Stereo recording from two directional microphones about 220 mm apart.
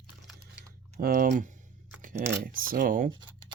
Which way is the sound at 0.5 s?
40° right (ahead or behind).